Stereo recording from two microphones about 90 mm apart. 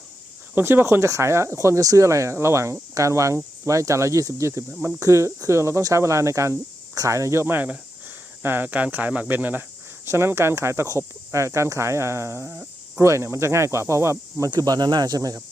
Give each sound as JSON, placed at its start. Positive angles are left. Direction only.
{"t": 0.5, "sound": "speech", "side_deg": -25}
{"t": 14.5, "sound": "speech", "side_deg": -45}